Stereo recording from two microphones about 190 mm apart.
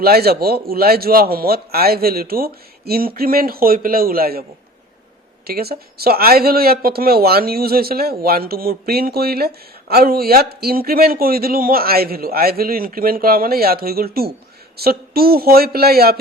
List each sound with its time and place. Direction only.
0.0 s a man's voice: 55° right (ahead or behind)
5.5 s a man's voice: 55° right (ahead or behind)